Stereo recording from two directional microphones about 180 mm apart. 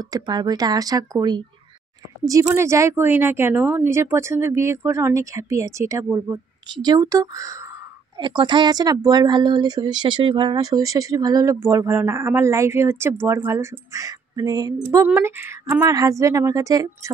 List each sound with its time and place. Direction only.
0.0 s speech: 20° right (ahead or behind)